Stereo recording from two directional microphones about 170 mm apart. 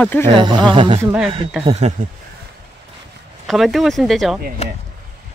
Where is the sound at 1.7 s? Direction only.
40° right (ahead or behind).